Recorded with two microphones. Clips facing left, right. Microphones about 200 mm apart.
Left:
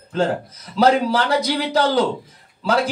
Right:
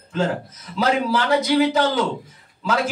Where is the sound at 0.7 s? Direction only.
35° left (ahead or behind).